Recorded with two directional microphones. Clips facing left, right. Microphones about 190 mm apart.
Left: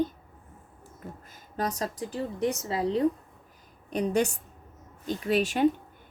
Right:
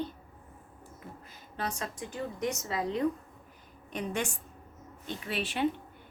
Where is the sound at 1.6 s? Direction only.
40° left (ahead or behind).